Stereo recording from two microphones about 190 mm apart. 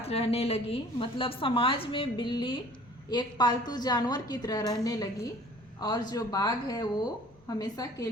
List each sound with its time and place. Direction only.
0.0 s a woman's voice: 30° left (ahead or behind)